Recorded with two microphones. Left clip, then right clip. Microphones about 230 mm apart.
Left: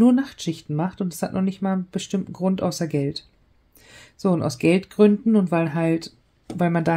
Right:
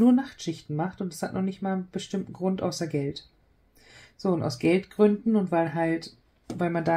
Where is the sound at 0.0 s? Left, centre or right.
Left.